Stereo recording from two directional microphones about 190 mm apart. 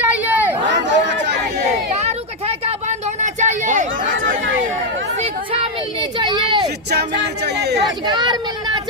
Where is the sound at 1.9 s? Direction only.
35° right (ahead or behind).